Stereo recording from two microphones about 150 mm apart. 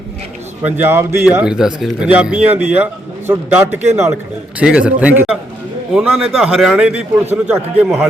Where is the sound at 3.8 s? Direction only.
50° right (ahead or behind).